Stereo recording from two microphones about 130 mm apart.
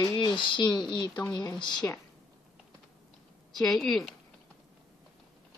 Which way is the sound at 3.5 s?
Centre (ahead or behind).